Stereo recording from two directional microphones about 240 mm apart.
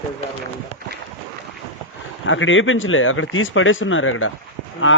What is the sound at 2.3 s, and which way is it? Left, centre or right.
A man's voice, left.